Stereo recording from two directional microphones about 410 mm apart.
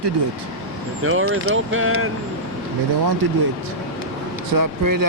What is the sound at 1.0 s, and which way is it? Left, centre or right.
Speech, right.